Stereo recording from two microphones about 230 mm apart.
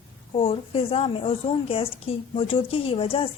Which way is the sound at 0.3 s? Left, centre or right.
Left.